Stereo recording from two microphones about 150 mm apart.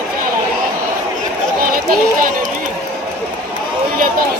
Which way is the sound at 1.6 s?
70° right (ahead or behind).